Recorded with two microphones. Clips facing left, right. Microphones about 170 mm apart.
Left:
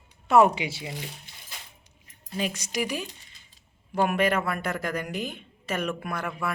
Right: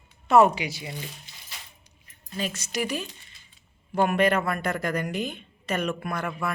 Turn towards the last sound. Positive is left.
turn(degrees=5)  # may be behind; listen again after turning